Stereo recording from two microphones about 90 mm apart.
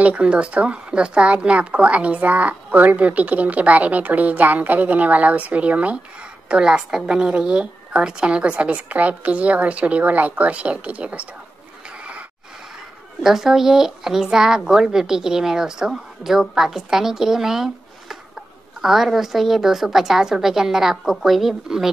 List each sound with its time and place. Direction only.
0.0 s speech: 15° right (ahead or behind)
12.0 s a sound: 15° right (ahead or behind)
13.2 s speech: 5° right (ahead or behind)